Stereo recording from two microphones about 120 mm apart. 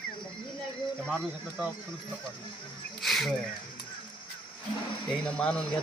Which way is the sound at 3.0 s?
Centre (ahead or behind).